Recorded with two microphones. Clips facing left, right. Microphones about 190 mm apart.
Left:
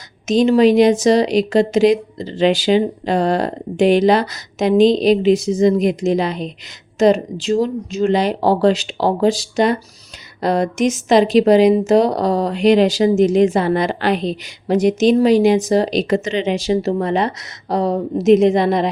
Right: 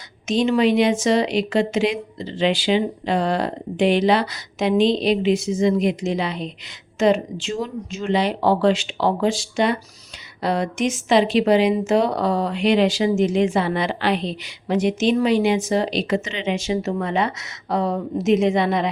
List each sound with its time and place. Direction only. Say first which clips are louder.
0.3 s a woman's voice: left 6 dB; 40° left (ahead or behind)